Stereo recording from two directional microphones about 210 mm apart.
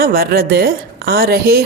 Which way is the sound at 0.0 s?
45° right (ahead or behind).